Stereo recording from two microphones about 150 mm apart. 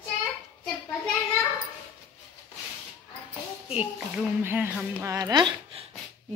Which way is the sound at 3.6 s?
10° right (ahead or behind).